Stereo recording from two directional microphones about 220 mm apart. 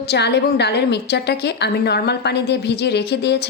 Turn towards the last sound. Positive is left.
turn(degrees=50)  # may be behind; listen again after turning